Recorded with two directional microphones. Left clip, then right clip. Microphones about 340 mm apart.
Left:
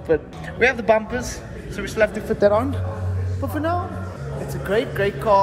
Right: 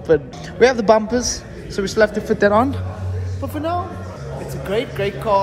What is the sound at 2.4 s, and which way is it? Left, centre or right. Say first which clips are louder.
Speech: right 2 dB; right.